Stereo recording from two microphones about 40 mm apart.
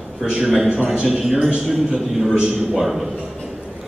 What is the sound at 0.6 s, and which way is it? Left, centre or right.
Speech, right.